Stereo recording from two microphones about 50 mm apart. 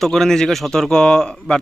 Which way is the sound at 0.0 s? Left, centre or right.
Centre.